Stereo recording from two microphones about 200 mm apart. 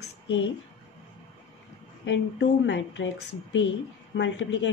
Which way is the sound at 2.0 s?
65° left (ahead or behind).